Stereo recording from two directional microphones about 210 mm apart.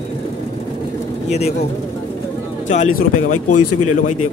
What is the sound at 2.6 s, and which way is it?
Speech, 35° left (ahead or behind).